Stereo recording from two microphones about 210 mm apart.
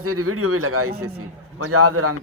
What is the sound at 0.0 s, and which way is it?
A man's voice, 90° right.